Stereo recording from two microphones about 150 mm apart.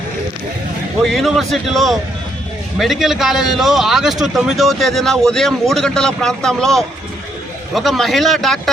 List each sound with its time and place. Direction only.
1.0 s a man's voice: centre (ahead or behind)